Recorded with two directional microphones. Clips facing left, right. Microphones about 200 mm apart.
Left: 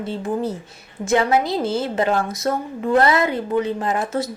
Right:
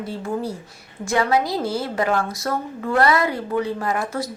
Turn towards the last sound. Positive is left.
turn(degrees=25)  # may be behind; listen again after turning